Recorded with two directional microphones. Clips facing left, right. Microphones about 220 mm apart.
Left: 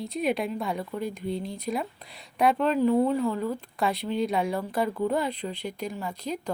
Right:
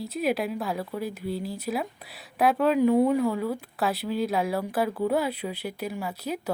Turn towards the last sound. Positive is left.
turn(degrees=-5)  # may be behind; listen again after turning